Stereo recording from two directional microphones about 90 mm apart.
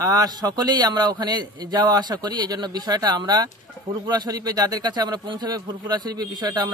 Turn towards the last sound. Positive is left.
turn(degrees=-45)  # may be behind; listen again after turning